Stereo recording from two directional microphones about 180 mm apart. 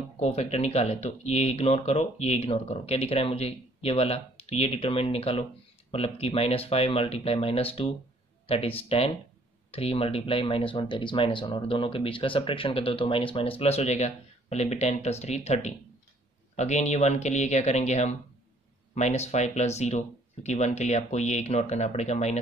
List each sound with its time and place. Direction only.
0.2 s speech: 35° left (ahead or behind)